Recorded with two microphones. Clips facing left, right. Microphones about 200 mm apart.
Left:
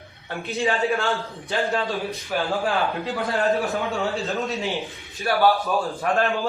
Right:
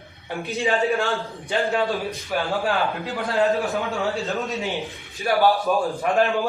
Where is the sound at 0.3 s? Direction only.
15° right (ahead or behind).